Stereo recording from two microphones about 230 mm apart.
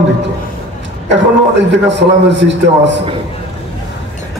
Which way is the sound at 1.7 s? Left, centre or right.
Right.